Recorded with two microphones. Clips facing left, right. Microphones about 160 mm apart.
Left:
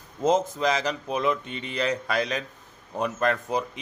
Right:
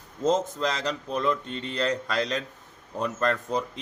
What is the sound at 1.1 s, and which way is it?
Speech, 15° left (ahead or behind).